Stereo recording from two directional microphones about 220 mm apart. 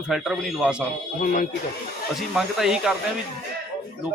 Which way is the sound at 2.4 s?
5° right (ahead or behind).